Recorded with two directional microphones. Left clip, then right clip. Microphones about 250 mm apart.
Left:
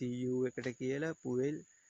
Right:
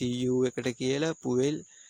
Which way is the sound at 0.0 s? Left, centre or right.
Right.